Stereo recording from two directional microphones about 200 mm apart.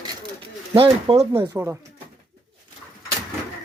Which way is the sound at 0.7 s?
25° right (ahead or behind).